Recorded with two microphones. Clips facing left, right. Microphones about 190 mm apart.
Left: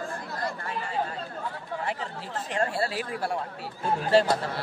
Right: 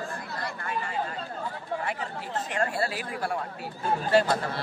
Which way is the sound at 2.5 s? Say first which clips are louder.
Left 2 dB; 30° left (ahead or behind).